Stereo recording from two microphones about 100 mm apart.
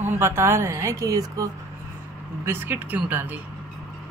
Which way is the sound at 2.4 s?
20° right (ahead or behind).